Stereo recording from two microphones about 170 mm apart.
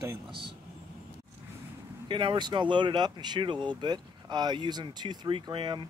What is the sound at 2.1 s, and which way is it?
Speech, 30° right (ahead or behind).